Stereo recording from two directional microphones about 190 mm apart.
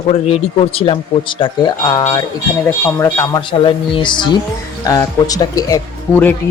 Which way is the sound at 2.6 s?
10° left (ahead or behind).